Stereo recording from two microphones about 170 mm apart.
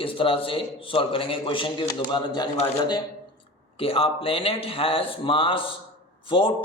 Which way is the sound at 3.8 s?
35° left (ahead or behind).